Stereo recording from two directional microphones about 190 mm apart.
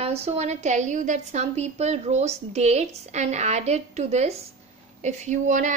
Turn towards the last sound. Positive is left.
turn(degrees=-40)  # may be behind; listen again after turning